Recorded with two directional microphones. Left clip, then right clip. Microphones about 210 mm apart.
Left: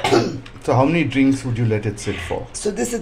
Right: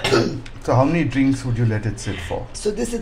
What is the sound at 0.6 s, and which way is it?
Speech, 15° left (ahead or behind).